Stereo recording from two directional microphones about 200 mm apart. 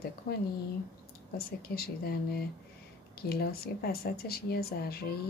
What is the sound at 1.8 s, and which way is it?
Speech, 50° left (ahead or behind).